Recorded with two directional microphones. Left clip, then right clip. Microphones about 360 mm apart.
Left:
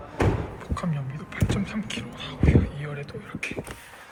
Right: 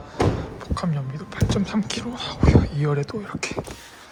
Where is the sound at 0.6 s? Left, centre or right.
Centre.